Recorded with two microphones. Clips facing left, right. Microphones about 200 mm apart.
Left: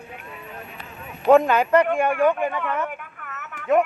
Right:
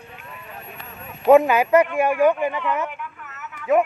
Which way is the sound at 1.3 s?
5° right (ahead or behind).